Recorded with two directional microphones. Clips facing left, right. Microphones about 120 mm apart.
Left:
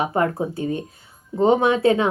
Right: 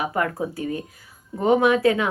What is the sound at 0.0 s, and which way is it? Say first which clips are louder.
Speech: left 3 dB; 30° left (ahead or behind).